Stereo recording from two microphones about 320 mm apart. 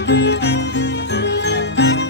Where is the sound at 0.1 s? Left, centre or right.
Left.